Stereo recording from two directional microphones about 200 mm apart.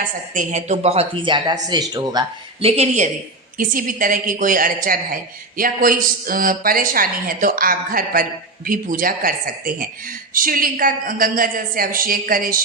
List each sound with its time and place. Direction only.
0.3 s a woman's voice: 35° right (ahead or behind)